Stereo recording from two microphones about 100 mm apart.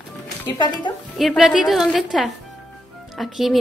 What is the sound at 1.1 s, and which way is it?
Speech, centre (ahead or behind).